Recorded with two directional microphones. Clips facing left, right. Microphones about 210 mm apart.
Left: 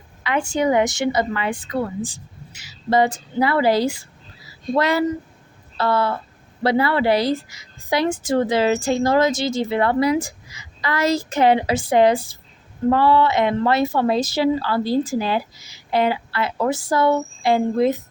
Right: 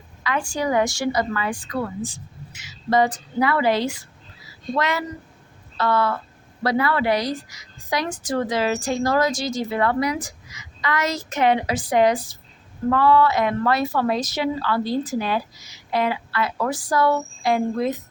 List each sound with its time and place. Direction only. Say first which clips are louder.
0.2 s a woman's voice: left 4 dB; 25° left (ahead or behind)